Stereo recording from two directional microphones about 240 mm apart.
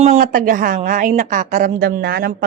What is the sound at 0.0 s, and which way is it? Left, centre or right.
A woman's voice, right.